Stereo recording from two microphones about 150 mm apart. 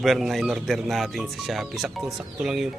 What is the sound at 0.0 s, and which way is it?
Speech, centre (ahead or behind).